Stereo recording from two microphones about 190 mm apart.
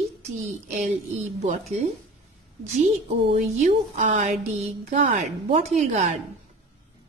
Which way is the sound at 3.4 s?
45° right (ahead or behind).